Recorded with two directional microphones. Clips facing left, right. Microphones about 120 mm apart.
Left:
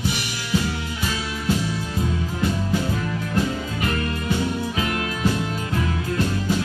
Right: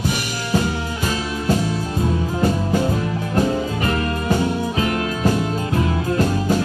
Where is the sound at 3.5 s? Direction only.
40° right (ahead or behind).